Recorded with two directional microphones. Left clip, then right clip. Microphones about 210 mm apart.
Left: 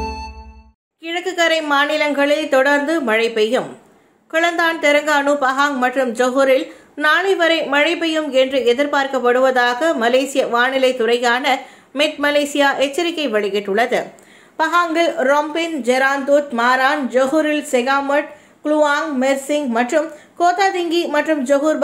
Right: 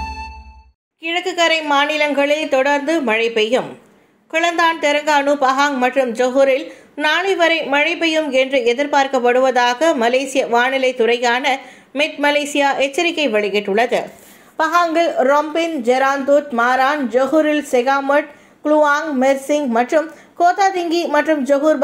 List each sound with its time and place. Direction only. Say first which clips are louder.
1.0 s a woman's voice: right 1 dB; 5° right (ahead or behind)